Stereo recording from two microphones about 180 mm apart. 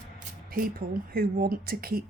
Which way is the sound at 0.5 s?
55° right (ahead or behind).